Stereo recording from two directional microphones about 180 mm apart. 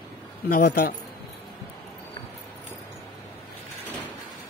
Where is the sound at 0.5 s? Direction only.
55° left (ahead or behind).